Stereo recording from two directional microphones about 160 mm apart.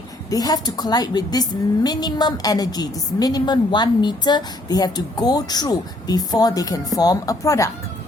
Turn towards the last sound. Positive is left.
turn(degrees=20)  # may be behind; listen again after turning